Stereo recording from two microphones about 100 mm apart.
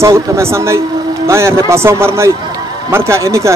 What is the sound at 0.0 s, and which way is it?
A man's voice, 30° right (ahead or behind).